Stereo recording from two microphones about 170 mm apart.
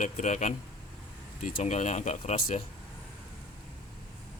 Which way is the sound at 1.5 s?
40° left (ahead or behind).